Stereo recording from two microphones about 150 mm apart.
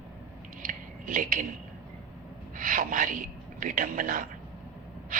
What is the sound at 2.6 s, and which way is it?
A man's voice, 65° right (ahead or behind).